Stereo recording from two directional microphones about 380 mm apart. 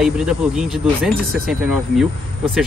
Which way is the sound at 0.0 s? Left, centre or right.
Centre.